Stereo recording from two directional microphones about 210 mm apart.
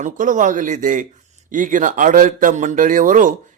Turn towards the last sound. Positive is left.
turn(degrees=-40)  # may be behind; listen again after turning